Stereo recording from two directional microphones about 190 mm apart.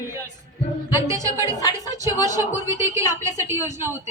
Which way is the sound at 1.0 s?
15° right (ahead or behind).